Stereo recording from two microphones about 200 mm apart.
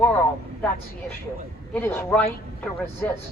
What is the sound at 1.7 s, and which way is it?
Speech, 10° left (ahead or behind).